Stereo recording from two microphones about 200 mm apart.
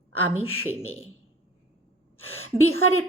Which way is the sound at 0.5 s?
90° left.